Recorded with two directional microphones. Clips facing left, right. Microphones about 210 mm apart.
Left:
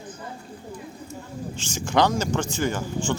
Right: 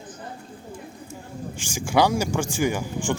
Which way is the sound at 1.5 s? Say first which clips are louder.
Right 1 dB; 10° right (ahead or behind).